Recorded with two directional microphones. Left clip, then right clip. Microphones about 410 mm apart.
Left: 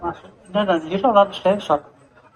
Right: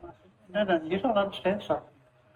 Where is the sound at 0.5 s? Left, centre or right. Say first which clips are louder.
Left 7 dB; centre.